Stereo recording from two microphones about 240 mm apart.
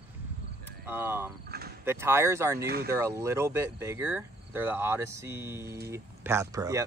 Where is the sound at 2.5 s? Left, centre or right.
Right.